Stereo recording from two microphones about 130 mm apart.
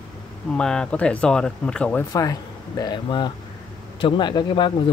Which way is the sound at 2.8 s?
35° left (ahead or behind).